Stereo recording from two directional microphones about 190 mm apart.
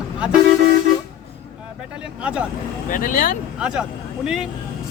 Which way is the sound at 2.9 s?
45° left (ahead or behind).